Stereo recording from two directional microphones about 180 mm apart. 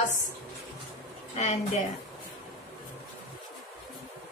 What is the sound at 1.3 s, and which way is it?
Speech, 40° left (ahead or behind).